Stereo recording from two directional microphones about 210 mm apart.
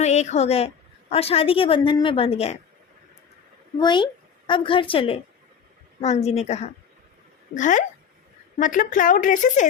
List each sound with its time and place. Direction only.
0.0 s a woman's voice: 30° left (ahead or behind)
3.8 s a woman's voice: 20° left (ahead or behind); by 9.6 s 35° left (ahead or behind)